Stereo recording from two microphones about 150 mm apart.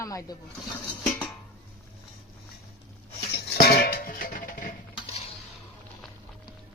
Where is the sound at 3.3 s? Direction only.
90° left; by 4.7 s 65° left (ahead or behind).